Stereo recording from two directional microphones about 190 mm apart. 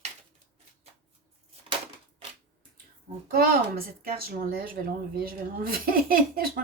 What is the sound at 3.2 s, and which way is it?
Speech, 50° right (ahead or behind).